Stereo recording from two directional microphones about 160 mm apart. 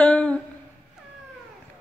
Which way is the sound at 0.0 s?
10° left (ahead or behind).